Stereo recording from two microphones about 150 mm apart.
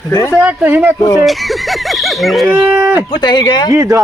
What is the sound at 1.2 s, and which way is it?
Speech, centre (ahead or behind).